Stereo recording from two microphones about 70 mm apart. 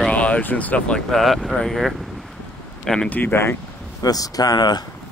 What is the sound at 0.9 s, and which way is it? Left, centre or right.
Speech, centre.